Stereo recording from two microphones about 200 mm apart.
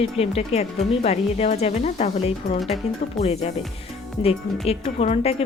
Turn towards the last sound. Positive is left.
turn(degrees=30)  # may be behind; listen again after turning